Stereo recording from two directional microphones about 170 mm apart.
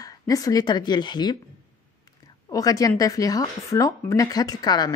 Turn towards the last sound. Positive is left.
turn(degrees=25)  # may be behind; listen again after turning